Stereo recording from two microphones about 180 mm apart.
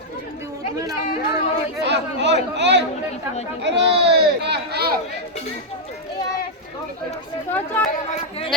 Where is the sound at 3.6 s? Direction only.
70° right (ahead or behind).